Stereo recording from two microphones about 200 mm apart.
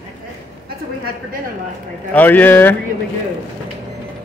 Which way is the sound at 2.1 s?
10° left (ahead or behind).